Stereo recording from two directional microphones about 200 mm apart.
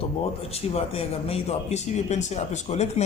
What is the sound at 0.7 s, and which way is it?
Speech, 30° left (ahead or behind).